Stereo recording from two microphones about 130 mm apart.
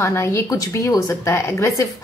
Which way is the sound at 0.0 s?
20° left (ahead or behind).